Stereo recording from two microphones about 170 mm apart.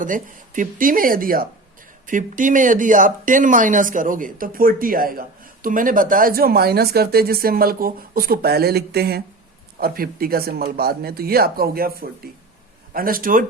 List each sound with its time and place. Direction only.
0.0 s speech: 50° right (ahead or behind)